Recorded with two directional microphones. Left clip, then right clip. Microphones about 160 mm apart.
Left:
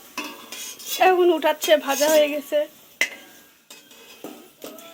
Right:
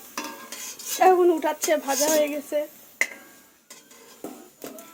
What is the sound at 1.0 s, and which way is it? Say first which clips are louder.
A woman's voice: left 1 dB; centre (ahead or behind).